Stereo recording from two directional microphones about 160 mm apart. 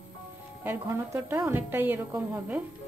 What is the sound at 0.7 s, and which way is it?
A woman's voice, 15° right (ahead or behind).